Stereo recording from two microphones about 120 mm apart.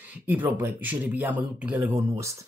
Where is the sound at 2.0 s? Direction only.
25° right (ahead or behind).